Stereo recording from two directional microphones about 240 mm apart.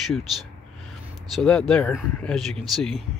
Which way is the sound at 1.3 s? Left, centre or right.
Centre.